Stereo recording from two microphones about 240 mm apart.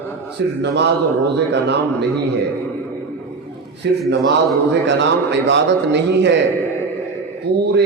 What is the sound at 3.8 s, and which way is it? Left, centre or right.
A man's voice, right.